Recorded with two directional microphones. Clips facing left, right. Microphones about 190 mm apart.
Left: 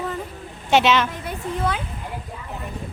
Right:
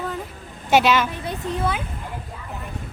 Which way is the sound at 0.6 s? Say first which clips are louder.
Even; 5° right (ahead or behind).